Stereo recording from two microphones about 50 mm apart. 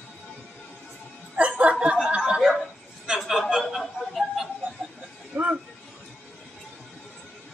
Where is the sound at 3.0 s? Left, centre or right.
Centre.